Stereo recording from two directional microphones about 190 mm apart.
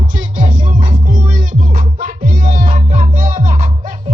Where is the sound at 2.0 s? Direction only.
45° right (ahead or behind).